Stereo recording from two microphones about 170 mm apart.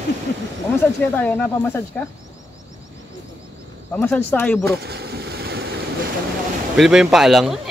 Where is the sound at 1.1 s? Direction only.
10° left (ahead or behind).